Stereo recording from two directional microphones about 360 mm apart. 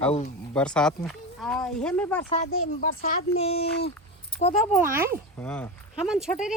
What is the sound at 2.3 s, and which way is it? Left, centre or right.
Speech, centre.